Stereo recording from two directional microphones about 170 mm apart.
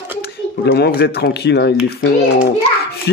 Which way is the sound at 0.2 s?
70° left (ahead or behind).